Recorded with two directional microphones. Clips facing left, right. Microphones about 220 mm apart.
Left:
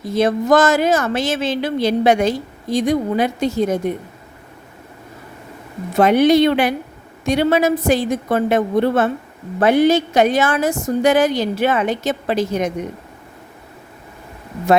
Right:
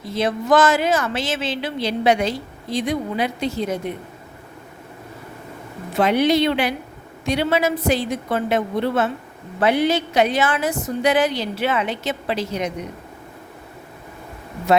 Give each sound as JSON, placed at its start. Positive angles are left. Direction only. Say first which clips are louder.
{"t": 0.0, "sound": "speech", "louder": "left 6 dB", "side_deg": 45}
{"t": 6.0, "sound": "speech", "louder": "left 5 dB", "side_deg": 50}